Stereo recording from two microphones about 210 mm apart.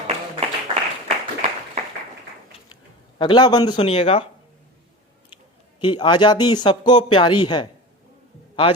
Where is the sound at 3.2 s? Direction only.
20° left (ahead or behind).